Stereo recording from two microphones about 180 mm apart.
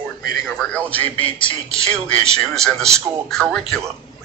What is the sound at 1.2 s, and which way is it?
Speech, 30° left (ahead or behind).